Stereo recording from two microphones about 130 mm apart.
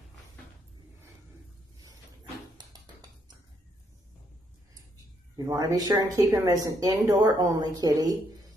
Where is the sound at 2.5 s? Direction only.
30° right (ahead or behind).